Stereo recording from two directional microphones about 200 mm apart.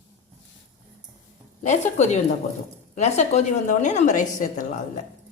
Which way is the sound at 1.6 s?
35° left (ahead or behind).